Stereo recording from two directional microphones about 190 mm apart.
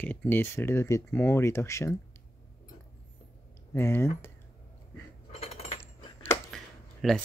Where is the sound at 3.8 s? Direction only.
15° left (ahead or behind).